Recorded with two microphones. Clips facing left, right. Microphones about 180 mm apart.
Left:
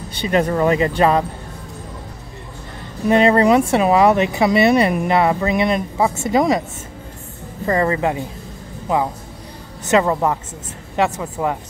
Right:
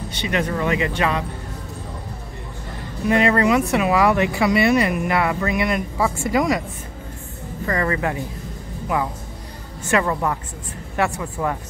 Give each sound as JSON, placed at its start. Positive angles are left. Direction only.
{"t": 0.3, "sound": "speech", "side_deg": 35}
{"t": 3.1, "sound": "speech", "side_deg": 30}
{"t": 7.6, "sound": "speech", "side_deg": 25}
{"t": 9.8, "sound": "speech", "side_deg": 20}